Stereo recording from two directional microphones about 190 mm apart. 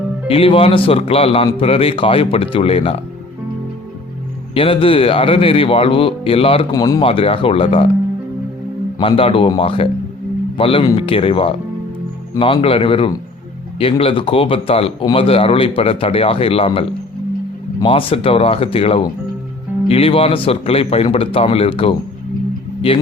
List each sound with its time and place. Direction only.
0.3 s a man's voice: 30° left (ahead or behind)
4.5 s speech: 30° left (ahead or behind)
9.0 s a man's voice: 30° left (ahead or behind)